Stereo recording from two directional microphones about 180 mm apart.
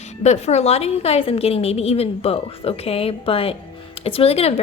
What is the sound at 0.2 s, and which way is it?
Speech, 40° left (ahead or behind).